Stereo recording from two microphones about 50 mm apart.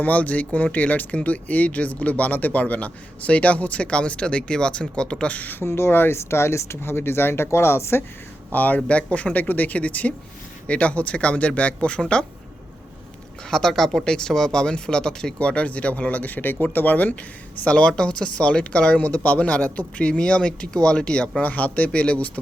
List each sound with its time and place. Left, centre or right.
0.0 s speech: left
5.6 s speech: left
8.5 s speech: left
13.5 s speech: centre
15.4 s speech: left
17.7 s speech: centre
21.4 s speech: left